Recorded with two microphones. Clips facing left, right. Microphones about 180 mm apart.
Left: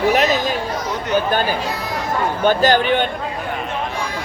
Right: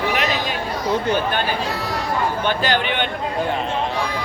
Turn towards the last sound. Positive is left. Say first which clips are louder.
# left 6 dB
turn(degrees=40)  # may be behind; listen again after turning